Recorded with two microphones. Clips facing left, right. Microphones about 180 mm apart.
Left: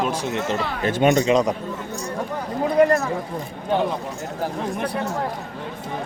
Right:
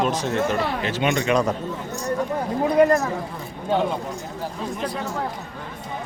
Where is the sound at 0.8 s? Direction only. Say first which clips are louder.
Left 9 dB; 45° left (ahead or behind).